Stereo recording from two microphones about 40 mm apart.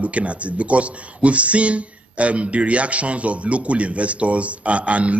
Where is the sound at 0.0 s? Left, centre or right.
Right.